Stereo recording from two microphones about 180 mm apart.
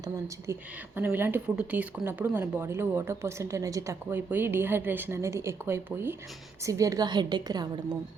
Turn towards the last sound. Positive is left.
turn(degrees=-25)  # may be behind; listen again after turning